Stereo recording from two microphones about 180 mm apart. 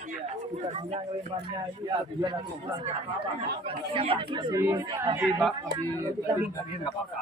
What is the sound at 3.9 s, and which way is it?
Speech, 30° right (ahead or behind).